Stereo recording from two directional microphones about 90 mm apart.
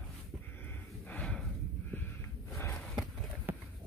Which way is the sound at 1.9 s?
20° left (ahead or behind).